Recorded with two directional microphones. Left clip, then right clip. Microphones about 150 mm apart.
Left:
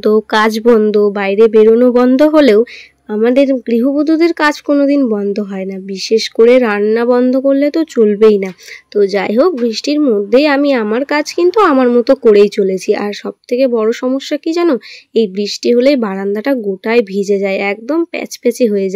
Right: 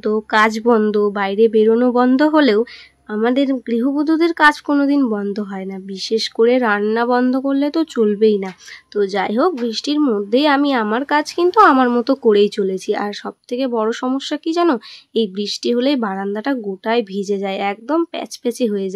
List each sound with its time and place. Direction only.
0.0 s speech: 25° left (ahead or behind)